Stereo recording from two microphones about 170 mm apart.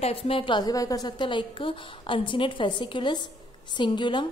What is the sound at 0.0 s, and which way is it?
A woman's voice, 35° left (ahead or behind).